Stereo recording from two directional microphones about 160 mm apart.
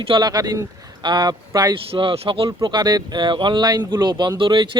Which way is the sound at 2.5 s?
25° right (ahead or behind).